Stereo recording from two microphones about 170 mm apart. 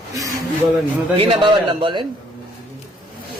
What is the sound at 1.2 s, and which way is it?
Speech, 30° right (ahead or behind).